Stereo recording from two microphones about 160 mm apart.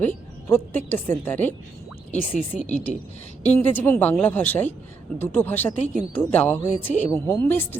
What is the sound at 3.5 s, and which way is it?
Speech, 10° left (ahead or behind).